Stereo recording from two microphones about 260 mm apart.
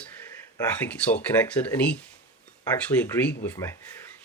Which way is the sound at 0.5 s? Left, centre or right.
Centre.